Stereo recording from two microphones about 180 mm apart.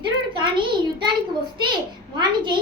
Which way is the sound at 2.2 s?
25° right (ahead or behind).